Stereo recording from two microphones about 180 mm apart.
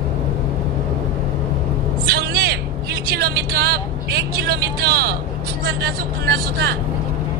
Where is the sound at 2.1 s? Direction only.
65° right (ahead or behind).